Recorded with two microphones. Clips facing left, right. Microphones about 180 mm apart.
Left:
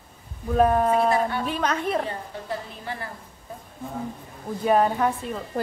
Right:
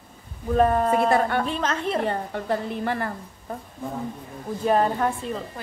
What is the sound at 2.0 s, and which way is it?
A woman's voice, 60° right (ahead or behind).